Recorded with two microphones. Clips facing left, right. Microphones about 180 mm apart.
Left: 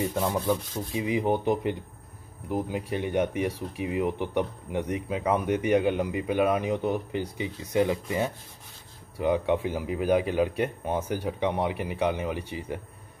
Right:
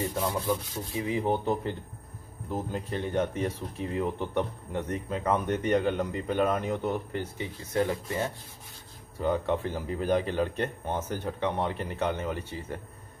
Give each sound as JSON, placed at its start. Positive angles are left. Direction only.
{"t": 0.9, "sound": "speech", "side_deg": 15}